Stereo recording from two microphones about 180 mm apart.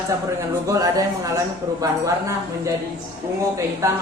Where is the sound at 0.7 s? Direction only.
20° right (ahead or behind).